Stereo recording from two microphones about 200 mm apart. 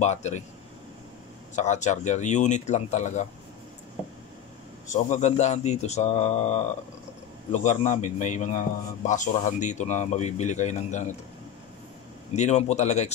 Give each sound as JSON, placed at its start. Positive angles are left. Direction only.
{"t": 0.0, "sound": "speech", "side_deg": 35}
{"t": 1.5, "sound": "speech", "side_deg": 35}
{"t": 4.8, "sound": "speech", "side_deg": 35}
{"t": 12.4, "sound": "speech", "side_deg": 35}